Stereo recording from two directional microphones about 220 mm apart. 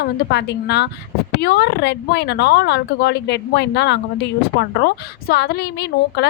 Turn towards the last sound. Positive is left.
turn(degrees=50)  # may be behind; listen again after turning